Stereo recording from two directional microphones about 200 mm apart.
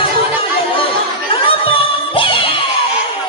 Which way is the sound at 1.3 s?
25° left (ahead or behind).